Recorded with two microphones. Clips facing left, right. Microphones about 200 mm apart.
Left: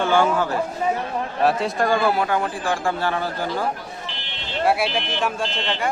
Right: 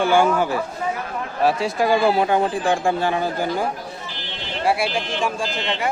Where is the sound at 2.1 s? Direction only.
20° right (ahead or behind).